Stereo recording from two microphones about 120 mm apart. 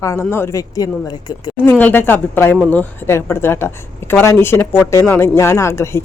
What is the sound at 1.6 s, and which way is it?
Speech, 15° left (ahead or behind).